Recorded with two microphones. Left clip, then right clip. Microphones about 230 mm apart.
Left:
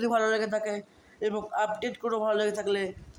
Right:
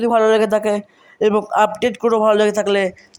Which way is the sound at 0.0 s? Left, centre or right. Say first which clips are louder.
Right 12 dB; right.